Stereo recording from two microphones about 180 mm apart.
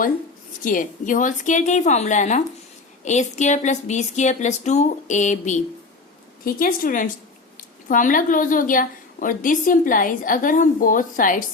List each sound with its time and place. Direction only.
0.6 s a woman's voice: 50° left (ahead or behind)
6.4 s a woman's voice: 50° left (ahead or behind)